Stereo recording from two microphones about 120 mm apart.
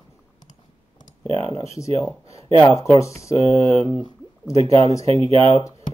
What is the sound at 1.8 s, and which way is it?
Speech, 25° left (ahead or behind).